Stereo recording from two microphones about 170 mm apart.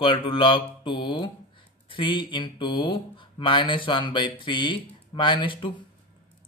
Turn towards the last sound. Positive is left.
turn(degrees=30)  # may be behind; listen again after turning